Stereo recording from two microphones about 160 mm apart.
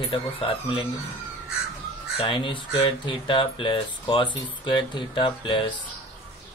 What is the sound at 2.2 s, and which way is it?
Speech, 30° left (ahead or behind).